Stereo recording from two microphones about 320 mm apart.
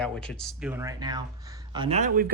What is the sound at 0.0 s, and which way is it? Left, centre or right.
Speech, centre.